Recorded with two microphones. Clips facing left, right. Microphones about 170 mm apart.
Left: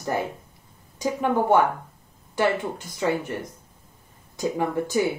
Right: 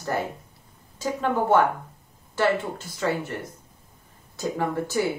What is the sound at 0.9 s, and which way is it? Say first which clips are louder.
Speech: left 2 dB; 15° left (ahead or behind).